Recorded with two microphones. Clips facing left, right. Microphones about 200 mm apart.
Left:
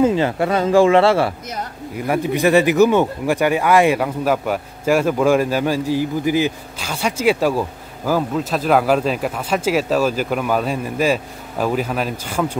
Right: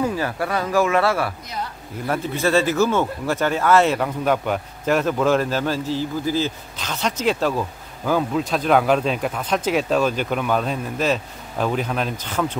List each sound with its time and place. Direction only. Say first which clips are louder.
0.0 s speech: left 7 dB; 20° left (ahead or behind)
2.0 s speech: left 5 dB; 15° left (ahead or behind)